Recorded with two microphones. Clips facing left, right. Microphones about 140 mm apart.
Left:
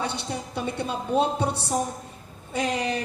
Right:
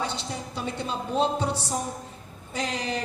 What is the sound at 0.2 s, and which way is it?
A woman's voice, 60° left (ahead or behind).